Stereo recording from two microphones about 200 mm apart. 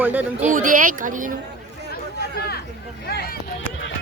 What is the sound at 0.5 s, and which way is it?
Speech, 40° right (ahead or behind).